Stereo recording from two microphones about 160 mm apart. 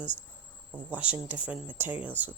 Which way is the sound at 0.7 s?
10° right (ahead or behind).